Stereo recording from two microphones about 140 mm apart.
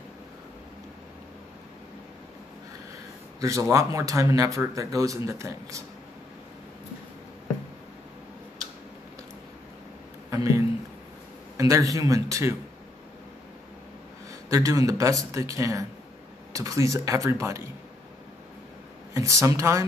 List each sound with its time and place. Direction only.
3.3 s speech: 25° right (ahead or behind)
10.3 s a sound: 20° right (ahead or behind)
11.5 s speech: 25° right (ahead or behind)
14.5 s speech: 25° right (ahead or behind)
19.1 s speech: 20° right (ahead or behind)